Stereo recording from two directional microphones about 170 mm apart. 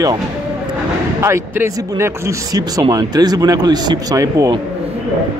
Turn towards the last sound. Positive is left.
turn(degrees=-20)  # may be behind; listen again after turning